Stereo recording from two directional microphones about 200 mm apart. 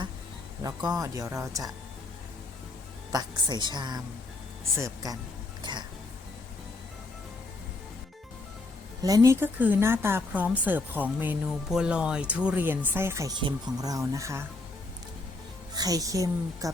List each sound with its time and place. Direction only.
0.6 s speech: 20° right (ahead or behind)
3.1 s a woman's voice: 20° right (ahead or behind)
5.7 s speech: 25° right (ahead or behind)
9.0 s speech: 20° right (ahead or behind)
15.7 s speech: 20° right (ahead or behind)